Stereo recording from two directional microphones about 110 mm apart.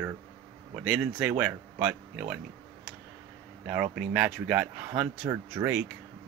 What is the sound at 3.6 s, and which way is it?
Speech, 10° right (ahead or behind).